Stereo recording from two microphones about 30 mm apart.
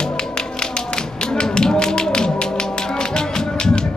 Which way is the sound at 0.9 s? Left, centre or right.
Left.